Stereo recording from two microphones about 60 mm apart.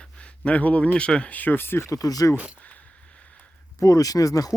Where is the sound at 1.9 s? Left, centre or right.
Left.